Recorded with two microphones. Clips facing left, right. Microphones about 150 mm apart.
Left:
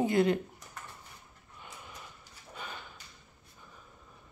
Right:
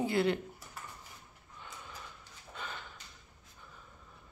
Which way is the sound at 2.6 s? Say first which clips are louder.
Even; 15° left (ahead or behind).